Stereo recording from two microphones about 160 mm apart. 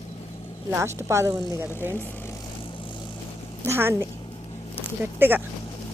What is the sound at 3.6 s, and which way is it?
Speech, 15° right (ahead or behind).